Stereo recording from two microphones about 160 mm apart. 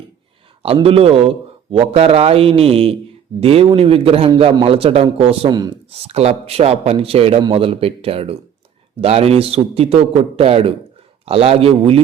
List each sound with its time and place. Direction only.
0.6 s a man's voice: 35° right (ahead or behind)
5.9 s a man's voice: 40° right (ahead or behind)